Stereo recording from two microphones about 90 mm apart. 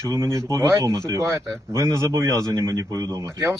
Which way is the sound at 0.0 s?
35° right (ahead or behind).